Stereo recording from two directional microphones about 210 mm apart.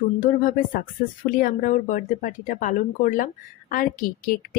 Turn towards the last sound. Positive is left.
turn(degrees=40)  # may be behind; listen again after turning